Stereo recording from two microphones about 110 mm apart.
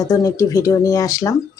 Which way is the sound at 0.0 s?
30° left (ahead or behind).